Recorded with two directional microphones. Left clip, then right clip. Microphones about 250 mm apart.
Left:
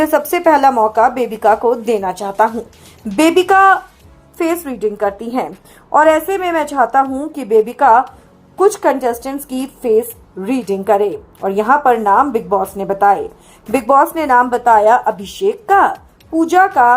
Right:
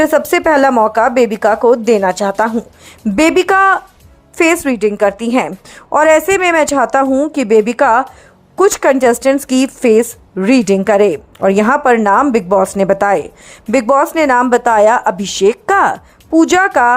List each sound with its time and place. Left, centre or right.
0.0 s a woman's voice: right